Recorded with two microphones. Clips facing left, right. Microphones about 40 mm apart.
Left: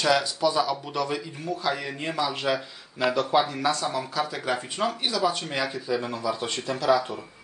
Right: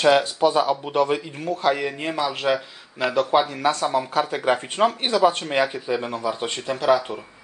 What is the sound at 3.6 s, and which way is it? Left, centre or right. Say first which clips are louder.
Speech: right 5 dB; right.